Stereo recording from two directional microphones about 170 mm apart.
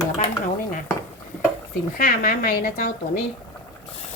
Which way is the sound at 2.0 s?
60° left (ahead or behind).